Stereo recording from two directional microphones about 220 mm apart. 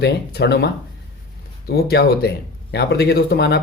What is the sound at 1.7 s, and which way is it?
Speech, 45° left (ahead or behind).